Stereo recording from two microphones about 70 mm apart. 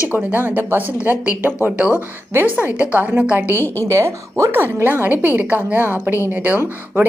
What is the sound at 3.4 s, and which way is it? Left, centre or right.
Speech, left.